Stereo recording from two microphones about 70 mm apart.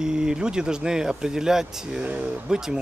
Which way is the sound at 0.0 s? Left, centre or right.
Centre.